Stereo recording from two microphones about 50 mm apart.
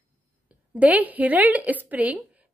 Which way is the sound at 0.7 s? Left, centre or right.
Right.